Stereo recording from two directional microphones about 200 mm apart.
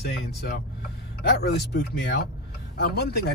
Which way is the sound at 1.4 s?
55° left (ahead or behind).